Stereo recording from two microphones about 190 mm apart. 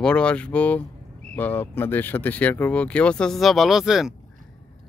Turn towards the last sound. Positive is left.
turn(degrees=0)  # may be behind; listen again after turning